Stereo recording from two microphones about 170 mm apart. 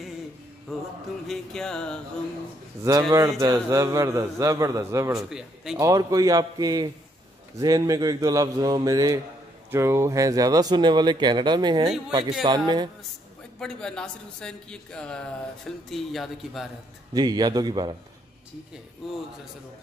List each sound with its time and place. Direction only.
1.2 s speech: centre (ahead or behind)
2.8 s a man's voice: 20° right (ahead or behind)
5.3 s speech: 5° right (ahead or behind)
5.8 s a man's voice: 20° right (ahead or behind)
13.6 s speech: 5° left (ahead or behind)
17.1 s a man's voice: 25° right (ahead or behind)
19.0 s speech: centre (ahead or behind)